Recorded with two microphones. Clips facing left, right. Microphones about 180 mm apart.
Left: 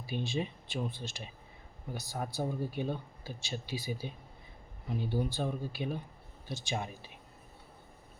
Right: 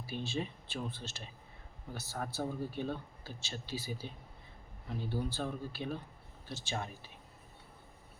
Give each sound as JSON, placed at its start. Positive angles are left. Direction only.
{"t": 0.0, "sound": "speech", "side_deg": 15}